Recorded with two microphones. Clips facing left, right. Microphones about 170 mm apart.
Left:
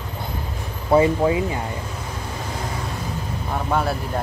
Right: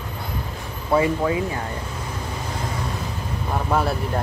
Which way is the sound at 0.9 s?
25° left (ahead or behind).